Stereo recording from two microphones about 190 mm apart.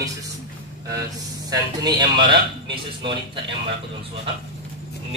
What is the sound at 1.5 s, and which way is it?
Speech, 20° right (ahead or behind).